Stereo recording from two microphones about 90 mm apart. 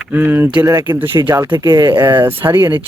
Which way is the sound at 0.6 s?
40° right (ahead or behind).